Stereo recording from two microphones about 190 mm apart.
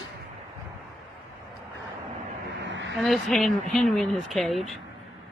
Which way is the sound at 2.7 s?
75° right (ahead or behind).